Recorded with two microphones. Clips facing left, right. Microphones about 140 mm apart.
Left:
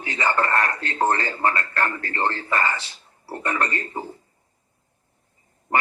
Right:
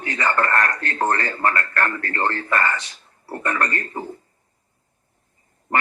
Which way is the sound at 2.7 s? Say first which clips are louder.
Right 3 dB; 30° left (ahead or behind).